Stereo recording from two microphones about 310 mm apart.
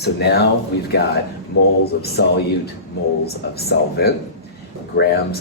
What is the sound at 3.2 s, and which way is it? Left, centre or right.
Speech, left.